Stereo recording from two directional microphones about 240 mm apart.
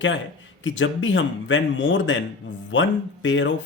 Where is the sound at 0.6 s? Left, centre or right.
Left.